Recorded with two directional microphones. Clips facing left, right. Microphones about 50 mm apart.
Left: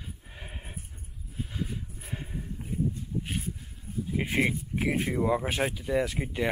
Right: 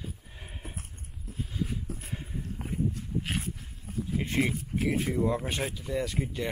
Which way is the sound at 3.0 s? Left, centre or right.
Right.